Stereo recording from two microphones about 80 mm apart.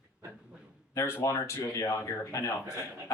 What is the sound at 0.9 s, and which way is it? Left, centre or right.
Speech, left.